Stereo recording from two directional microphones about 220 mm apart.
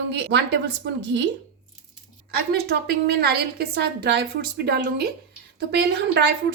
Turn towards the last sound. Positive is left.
turn(degrees=-50)  # may be behind; listen again after turning